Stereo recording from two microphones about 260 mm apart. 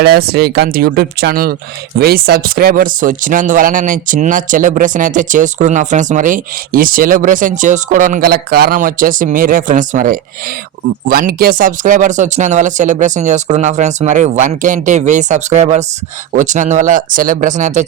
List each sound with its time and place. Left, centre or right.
0.0 s speech: right